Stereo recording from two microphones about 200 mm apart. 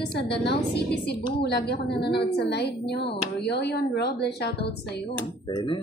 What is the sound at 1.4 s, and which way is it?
A woman's voice, 55° left (ahead or behind).